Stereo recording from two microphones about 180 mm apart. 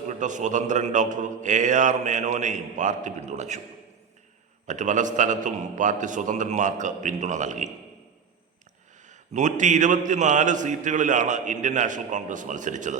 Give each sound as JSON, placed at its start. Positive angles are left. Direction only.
{"t": 0.2, "sound": "a man's voice", "side_deg": -45}
{"t": 4.6, "sound": "a man's voice", "side_deg": -45}
{"t": 9.0, "sound": "a man's voice", "side_deg": -45}